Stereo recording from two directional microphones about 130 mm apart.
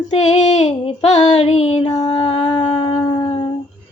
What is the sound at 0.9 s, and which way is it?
Female singing, 55° left (ahead or behind).